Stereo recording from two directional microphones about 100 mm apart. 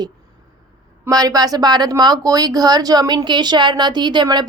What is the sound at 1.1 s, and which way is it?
Speech, 40° right (ahead or behind).